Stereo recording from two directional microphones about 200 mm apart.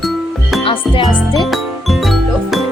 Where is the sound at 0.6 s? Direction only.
25° left (ahead or behind).